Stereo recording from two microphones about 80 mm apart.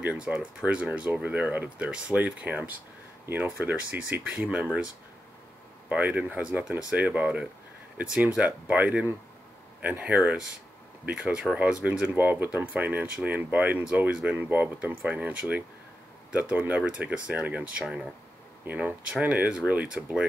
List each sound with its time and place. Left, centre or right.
0.0 s speech: centre
5.9 s speech: centre